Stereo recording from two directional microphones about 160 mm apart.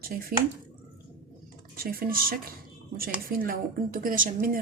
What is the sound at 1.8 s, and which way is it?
A woman's voice, 65° right (ahead or behind).